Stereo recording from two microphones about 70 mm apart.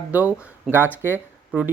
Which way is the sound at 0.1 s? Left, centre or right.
Right.